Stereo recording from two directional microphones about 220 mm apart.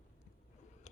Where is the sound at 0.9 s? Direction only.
30° left (ahead or behind).